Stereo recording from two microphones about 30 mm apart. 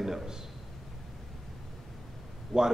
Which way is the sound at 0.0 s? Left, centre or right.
Centre.